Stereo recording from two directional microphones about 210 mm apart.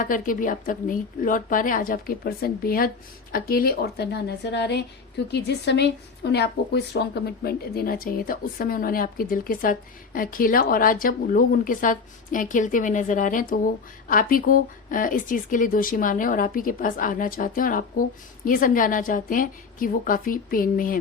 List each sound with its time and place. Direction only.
0.0 s speech: 40° left (ahead or behind)